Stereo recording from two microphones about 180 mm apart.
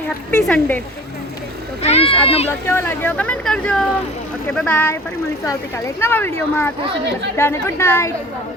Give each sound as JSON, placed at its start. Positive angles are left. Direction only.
{"t": 0.3, "sound": "speech", "side_deg": 5}
{"t": 1.8, "sound": "a child's voice", "side_deg": 35}
{"t": 2.6, "sound": "speech", "side_deg": 10}
{"t": 6.0, "sound": "speech", "side_deg": 10}